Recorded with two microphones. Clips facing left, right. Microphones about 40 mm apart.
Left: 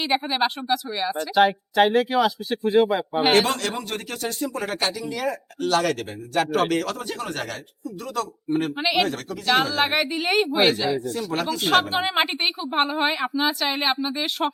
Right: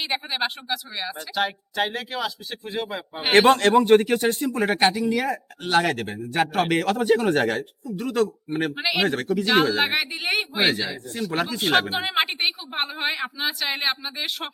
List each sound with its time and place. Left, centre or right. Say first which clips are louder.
0.1 s a woman's voice: left 4 dB; centre
1.4 s speech: left 7 dB; centre
3.3 s speech: right 7 dB; right
3.6 s speech: right 13 dB; right
9.4 s speech: even; centre
11.3 s speech: right 2 dB; right
11.6 s a woman's voice: left 2 dB; centre